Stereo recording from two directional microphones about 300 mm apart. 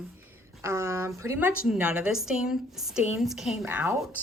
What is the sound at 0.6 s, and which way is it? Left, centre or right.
A woman's voice, centre.